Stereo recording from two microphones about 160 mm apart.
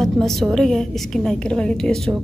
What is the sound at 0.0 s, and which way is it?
A woman's voice, centre (ahead or behind).